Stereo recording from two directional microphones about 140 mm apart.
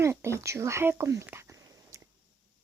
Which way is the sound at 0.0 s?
20° right (ahead or behind).